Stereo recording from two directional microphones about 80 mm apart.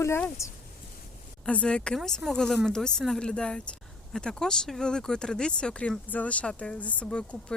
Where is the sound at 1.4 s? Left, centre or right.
Centre.